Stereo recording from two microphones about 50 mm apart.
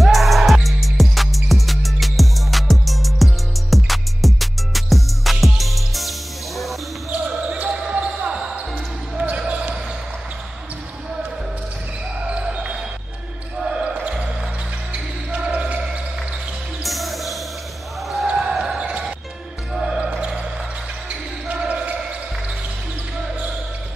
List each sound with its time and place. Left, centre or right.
0.0 s music: centre
7.1 s basketball bounce: right
12.3 s basketball bounce: right
13.8 s basketball bounce: right
16.8 s music: centre
18.2 s basketball bounce: centre
18.5 s basketball bounce: centre
18.8 s basketball bounce: right
19.7 s music: centre
20.0 s basketball bounce: right
21.5 s basketball bounce: right